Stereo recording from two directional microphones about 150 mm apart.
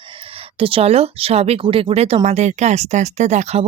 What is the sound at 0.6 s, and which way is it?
Speech, 40° right (ahead or behind).